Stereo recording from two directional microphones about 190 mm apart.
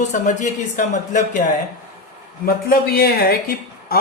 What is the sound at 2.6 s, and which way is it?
Speech, 55° left (ahead or behind).